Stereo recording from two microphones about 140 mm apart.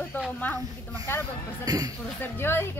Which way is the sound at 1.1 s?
20° left (ahead or behind).